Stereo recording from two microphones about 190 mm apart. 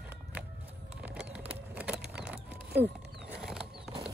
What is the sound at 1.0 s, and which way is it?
Bird, 5° right (ahead or behind).